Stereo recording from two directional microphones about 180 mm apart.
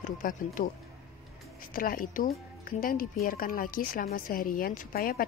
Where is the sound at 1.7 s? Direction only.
50° left (ahead or behind).